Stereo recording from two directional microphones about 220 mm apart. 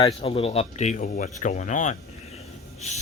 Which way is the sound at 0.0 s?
25° left (ahead or behind).